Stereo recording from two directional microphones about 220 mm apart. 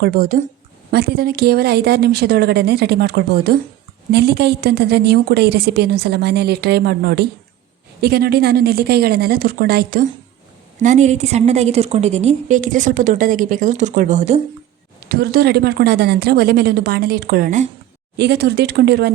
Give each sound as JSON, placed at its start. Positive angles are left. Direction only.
{"t": 0.0, "sound": "a woman's voice", "side_deg": -40}
{"t": 10.8, "sound": "a woman's voice", "side_deg": -30}
{"t": 15.1, "sound": "a woman's voice", "side_deg": -45}
{"t": 18.2, "sound": "a woman's voice", "side_deg": -50}